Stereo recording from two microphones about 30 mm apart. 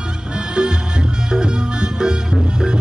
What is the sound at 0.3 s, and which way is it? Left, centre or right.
Music, right.